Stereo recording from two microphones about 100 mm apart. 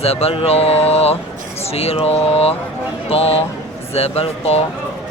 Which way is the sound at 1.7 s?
80° left.